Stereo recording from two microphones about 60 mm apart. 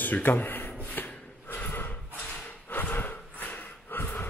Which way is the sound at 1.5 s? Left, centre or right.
Left.